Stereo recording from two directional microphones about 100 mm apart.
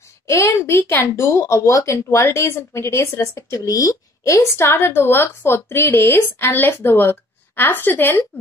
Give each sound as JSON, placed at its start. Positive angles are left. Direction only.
{"t": 0.3, "sound": "speech", "side_deg": 25}